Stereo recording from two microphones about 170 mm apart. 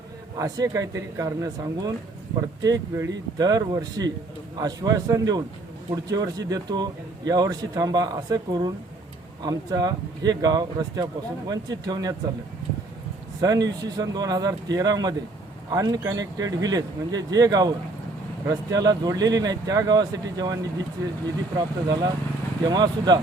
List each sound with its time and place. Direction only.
0.3 s speech: 20° right (ahead or behind)
13.4 s speech: 20° right (ahead or behind)